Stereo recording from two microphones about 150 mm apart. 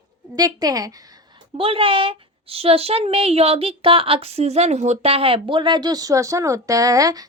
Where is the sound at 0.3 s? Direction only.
25° right (ahead or behind).